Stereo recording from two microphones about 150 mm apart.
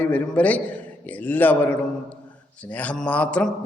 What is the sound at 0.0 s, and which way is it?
A man's voice, 10° left (ahead or behind).